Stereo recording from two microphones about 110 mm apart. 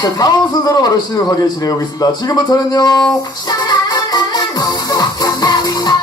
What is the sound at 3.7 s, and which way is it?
Music, 40° left (ahead or behind).